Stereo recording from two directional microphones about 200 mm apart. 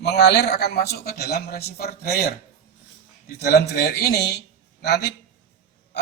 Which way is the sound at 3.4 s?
55° left (ahead or behind).